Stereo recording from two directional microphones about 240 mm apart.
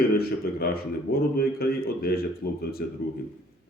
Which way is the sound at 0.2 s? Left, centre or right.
Left.